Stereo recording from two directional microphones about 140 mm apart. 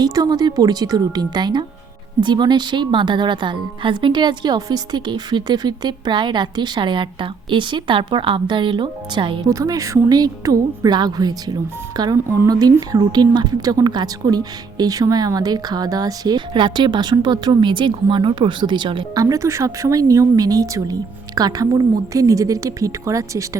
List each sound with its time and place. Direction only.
0.0 s a woman's voice: 30° right (ahead or behind)
9.5 s a woman's voice: 25° right (ahead or behind)